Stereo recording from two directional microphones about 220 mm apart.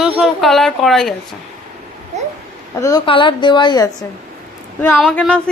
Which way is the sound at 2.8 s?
20° left (ahead or behind).